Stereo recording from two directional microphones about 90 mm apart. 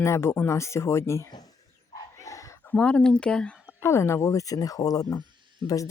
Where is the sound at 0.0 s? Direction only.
30° left (ahead or behind).